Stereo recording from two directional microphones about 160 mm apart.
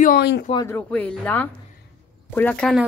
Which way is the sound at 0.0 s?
80° left.